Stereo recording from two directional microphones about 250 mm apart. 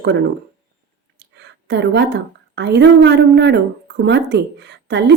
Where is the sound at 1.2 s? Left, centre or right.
Right.